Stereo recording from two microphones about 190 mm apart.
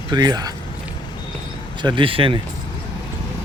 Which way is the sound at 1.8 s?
25° right (ahead or behind).